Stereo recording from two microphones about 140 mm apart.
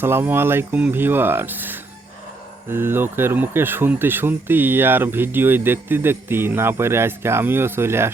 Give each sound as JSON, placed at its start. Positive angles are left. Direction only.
{"t": 0.0, "sound": "speech", "side_deg": -15}